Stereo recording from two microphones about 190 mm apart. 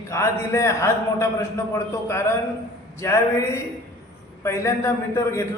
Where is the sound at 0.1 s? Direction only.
15° left (ahead or behind).